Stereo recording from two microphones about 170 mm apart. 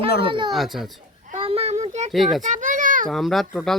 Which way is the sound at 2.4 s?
45° right (ahead or behind).